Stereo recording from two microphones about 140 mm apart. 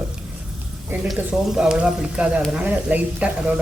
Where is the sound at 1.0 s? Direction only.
5° right (ahead or behind).